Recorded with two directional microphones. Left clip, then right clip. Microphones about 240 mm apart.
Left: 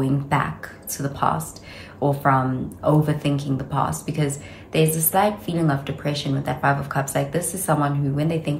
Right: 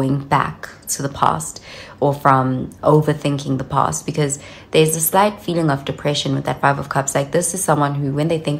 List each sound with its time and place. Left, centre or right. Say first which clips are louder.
0.0 s speech: right 5 dB; right